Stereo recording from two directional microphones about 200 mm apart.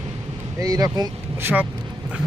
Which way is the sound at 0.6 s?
15° right (ahead or behind).